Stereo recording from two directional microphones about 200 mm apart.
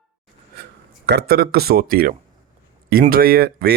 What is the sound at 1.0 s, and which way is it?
Speech, 55° right (ahead or behind).